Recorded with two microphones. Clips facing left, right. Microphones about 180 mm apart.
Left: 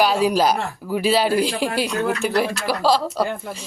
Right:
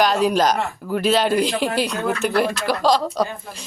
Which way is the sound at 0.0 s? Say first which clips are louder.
Even; 5° left (ahead or behind).